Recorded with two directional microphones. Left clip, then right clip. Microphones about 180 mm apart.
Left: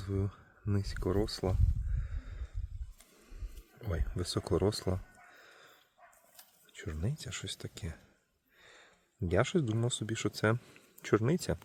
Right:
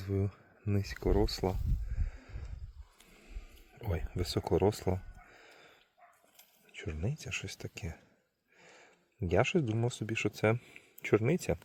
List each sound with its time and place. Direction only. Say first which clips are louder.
0.0 s speech: right 2 dB; 5° right (ahead or behind)
2.0 s sniff: right 1 dB; centre (ahead or behind)
3.8 s speech: right 1 dB; centre (ahead or behind)
5.4 s a sound: even; centre (ahead or behind)
6.7 s speech: right 1 dB; centre (ahead or behind)
8.5 s a sound: even; 5° left (ahead or behind)
9.3 s speech: right 1 dB; 5° left (ahead or behind)